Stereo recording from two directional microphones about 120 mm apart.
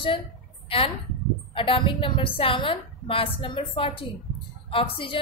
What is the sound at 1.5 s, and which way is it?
A woman's voice, 40° left (ahead or behind).